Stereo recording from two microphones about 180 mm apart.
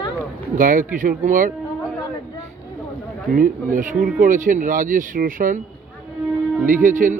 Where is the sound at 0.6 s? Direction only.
50° right (ahead or behind).